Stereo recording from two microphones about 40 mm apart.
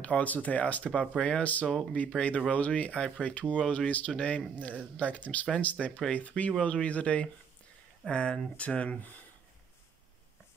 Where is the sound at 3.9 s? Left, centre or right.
Left.